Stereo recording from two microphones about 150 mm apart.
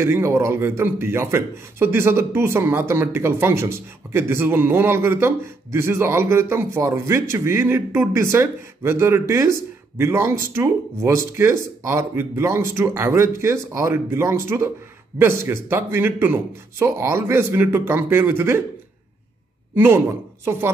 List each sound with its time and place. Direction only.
0.0 s a man's voice: 15° right (ahead or behind)
19.7 s speech: 15° right (ahead or behind)